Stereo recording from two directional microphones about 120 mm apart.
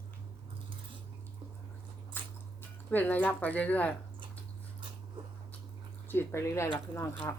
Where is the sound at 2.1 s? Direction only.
15° left (ahead or behind).